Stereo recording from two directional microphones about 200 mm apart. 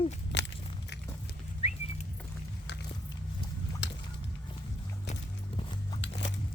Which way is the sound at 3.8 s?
60° left (ahead or behind).